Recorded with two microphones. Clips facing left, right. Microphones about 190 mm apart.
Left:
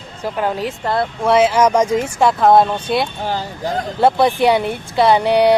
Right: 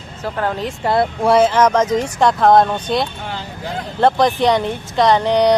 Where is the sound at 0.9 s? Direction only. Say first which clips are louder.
Right 4 dB; 15° right (ahead or behind).